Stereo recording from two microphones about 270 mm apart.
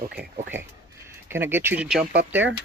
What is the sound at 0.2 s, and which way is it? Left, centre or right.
Speech, right.